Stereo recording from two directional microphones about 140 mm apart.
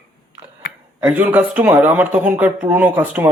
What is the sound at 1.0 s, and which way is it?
Speech, 10° right (ahead or behind).